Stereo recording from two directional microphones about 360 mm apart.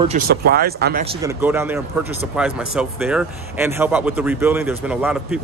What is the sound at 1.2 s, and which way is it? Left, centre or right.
Speech, centre.